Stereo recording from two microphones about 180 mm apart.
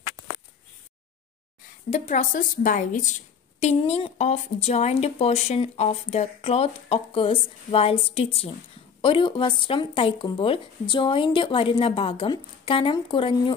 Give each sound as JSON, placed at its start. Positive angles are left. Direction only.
{"t": 1.9, "sound": "a woman's voice", "side_deg": 40}